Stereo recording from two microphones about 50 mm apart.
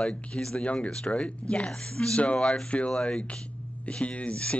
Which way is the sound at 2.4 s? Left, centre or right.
Centre.